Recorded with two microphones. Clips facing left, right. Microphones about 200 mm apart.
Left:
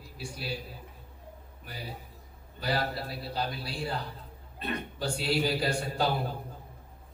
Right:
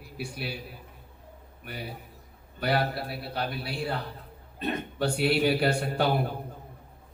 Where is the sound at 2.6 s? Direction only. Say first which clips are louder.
Right 4 dB; 65° right (ahead or behind).